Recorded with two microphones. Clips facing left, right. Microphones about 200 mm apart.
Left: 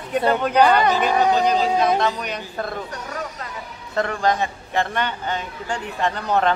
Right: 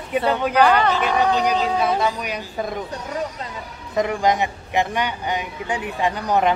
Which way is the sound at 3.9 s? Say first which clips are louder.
Right 2 dB; 15° right (ahead or behind).